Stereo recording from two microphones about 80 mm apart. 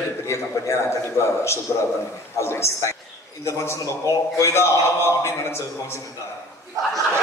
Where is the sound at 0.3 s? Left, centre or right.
Left.